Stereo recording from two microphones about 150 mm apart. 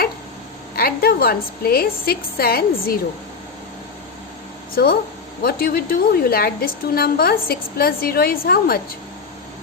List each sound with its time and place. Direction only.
0.8 s a woman's voice: 90° left
4.8 s a woman's voice: 90° left